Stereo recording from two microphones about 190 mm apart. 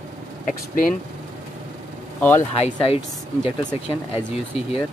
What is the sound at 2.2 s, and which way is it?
Speech, 10° left (ahead or behind).